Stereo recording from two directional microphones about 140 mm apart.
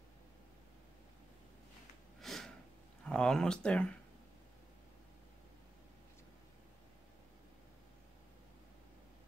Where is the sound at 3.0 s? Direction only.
5° left (ahead or behind).